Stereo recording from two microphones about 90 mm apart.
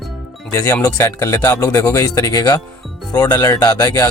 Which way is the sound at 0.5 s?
30° left (ahead or behind).